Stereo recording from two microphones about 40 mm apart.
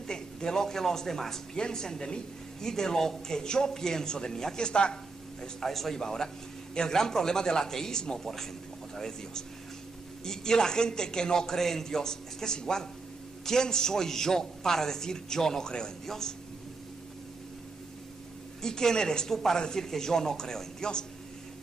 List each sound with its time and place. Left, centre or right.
0.0 s a woman's voice: centre
5.4 s a woman's voice: centre
18.6 s a woman's voice: centre